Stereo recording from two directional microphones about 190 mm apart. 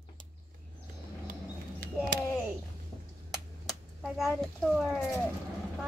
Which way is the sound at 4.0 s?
Centre (ahead or behind).